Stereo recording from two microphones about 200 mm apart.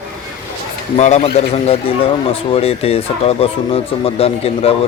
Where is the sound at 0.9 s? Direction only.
35° left (ahead or behind).